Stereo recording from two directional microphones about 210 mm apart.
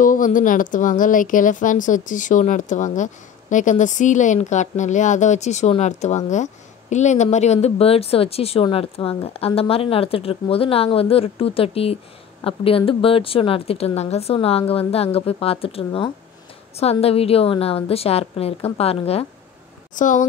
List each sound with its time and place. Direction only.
0.0 s speech: 40° left (ahead or behind)